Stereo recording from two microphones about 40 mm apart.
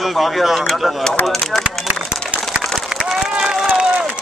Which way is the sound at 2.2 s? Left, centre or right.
Right.